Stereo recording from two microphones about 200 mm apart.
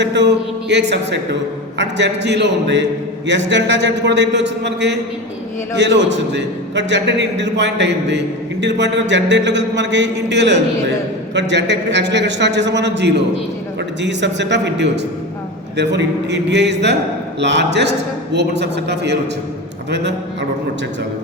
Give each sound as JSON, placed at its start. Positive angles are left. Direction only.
{"t": 0.0, "sound": "a man's voice", "side_deg": -60}